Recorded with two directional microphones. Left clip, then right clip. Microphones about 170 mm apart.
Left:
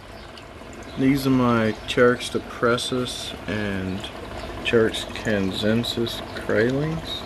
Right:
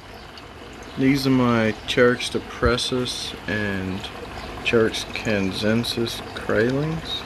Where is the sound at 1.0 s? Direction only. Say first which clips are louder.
Right 1 dB; centre (ahead or behind).